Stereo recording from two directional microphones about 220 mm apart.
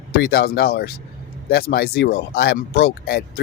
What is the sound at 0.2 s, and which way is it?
Speech, 45° left (ahead or behind).